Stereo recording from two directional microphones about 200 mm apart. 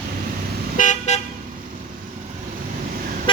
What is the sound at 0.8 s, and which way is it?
Car, 35° left (ahead or behind).